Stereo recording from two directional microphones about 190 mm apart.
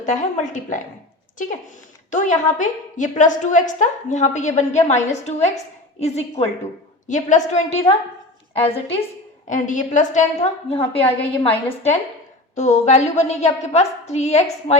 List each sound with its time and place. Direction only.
0.0 s a woman's voice: 40° left (ahead or behind)
9.5 s a woman's voice: 40° left (ahead or behind)
11.0 s a woman's voice: 10° left (ahead or behind)
12.5 s a woman's voice: 35° left (ahead or behind)